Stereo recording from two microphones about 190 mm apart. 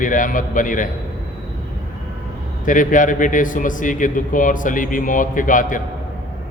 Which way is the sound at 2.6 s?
45° left (ahead or behind).